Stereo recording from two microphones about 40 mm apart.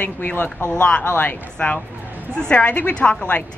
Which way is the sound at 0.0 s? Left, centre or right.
Left.